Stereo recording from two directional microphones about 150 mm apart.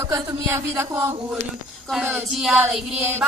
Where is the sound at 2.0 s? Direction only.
10° right (ahead or behind).